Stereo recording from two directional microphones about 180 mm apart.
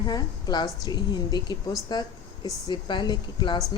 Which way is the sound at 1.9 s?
25° left (ahead or behind).